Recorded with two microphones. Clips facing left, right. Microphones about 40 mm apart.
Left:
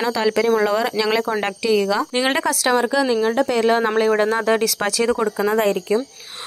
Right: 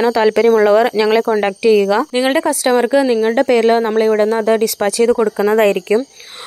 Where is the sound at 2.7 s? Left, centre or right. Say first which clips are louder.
Right 7 dB; right.